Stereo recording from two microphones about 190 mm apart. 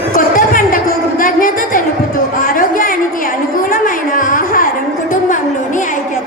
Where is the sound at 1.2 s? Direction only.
45° left (ahead or behind).